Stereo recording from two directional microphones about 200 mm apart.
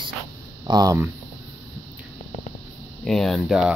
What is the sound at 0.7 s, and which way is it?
Speech, 20° right (ahead or behind).